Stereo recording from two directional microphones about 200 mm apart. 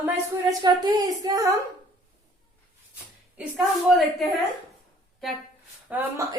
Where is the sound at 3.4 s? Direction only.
Centre (ahead or behind).